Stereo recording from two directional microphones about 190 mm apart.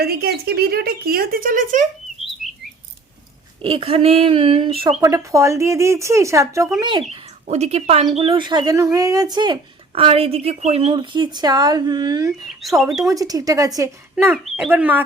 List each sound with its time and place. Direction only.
0.0 s speech: 55° right (ahead or behind)
3.6 s speech: 25° right (ahead or behind)
4.9 s speech: 15° right (ahead or behind)
7.1 s speech: 35° right (ahead or behind); by 14.3 s 15° right (ahead or behind)
14.3 s speech: centre (ahead or behind)